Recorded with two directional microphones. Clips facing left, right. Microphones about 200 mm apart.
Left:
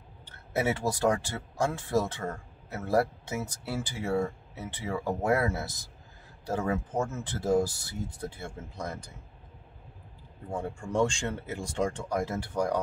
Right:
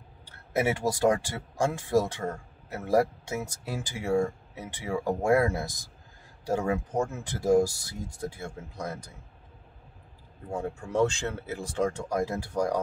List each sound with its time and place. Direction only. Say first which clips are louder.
0.6 s speech: right 2 dB; 15° right (ahead or behind)
10.5 s speech: right 1 dB; 5° right (ahead or behind)